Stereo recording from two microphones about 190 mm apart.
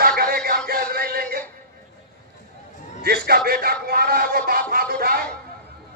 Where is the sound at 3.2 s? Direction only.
55° right (ahead or behind).